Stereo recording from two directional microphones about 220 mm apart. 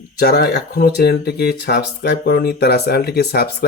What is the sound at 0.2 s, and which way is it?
Speech, 45° left (ahead or behind).